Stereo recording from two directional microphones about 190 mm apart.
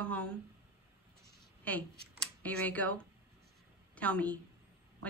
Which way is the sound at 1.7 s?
10° left (ahead or behind).